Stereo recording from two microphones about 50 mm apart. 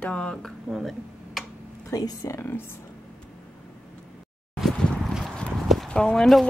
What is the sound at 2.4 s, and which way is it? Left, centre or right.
Speech, left.